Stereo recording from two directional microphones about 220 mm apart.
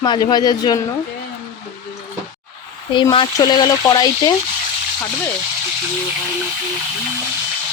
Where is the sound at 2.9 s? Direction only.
20° left (ahead or behind).